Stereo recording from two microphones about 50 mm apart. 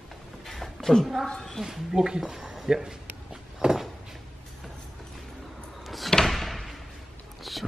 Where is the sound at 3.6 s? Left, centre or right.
Centre.